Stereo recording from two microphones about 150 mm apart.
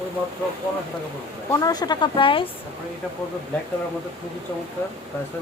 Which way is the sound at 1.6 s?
25° left (ahead or behind).